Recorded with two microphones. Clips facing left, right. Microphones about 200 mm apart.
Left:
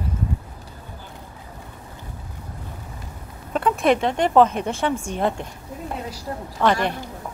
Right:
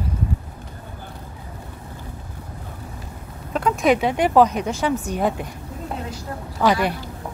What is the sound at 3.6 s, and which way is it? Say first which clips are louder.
A woman's voice: right 1 dB; centre (ahead or behind).